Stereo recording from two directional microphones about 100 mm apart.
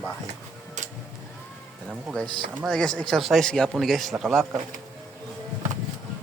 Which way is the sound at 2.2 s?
50° right (ahead or behind).